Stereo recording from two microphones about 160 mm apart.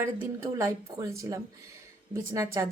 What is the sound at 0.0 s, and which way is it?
Speech, 15° right (ahead or behind).